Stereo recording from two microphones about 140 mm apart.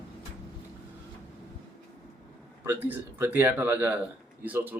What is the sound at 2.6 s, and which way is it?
A man's voice, 15° right (ahead or behind).